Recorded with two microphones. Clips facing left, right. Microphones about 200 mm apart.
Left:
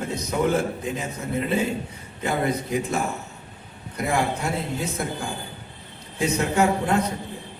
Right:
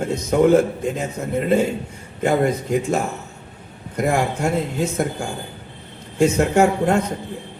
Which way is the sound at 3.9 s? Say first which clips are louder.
Right 4 dB; 45° right (ahead or behind).